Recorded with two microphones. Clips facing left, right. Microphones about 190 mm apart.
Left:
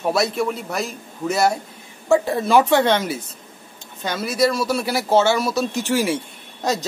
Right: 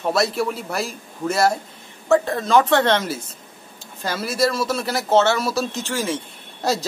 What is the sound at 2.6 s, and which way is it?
Speech, centre (ahead or behind).